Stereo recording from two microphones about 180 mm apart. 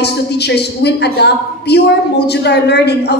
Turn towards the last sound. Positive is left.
turn(degrees=65)  # may be behind; listen again after turning